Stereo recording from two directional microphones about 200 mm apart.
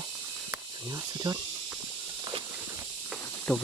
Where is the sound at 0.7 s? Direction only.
20° right (ahead or behind).